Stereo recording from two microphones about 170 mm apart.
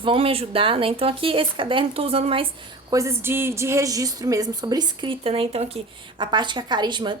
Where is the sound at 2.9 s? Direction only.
15° right (ahead or behind).